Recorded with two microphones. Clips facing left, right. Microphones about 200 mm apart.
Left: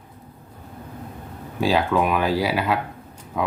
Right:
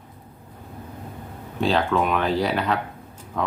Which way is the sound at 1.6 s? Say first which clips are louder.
Left 1 dB; 5° left (ahead or behind).